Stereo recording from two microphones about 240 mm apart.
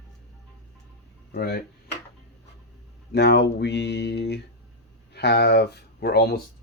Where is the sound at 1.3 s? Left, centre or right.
Left.